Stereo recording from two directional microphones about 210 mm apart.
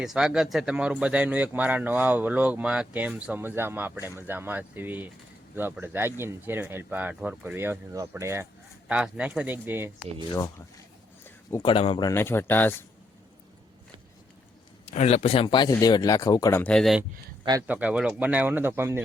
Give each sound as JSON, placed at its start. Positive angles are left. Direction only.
{"t": 0.0, "sound": "speech", "side_deg": -5}
{"t": 11.5, "sound": "speech", "side_deg": 25}
{"t": 14.8, "sound": "speech", "side_deg": 30}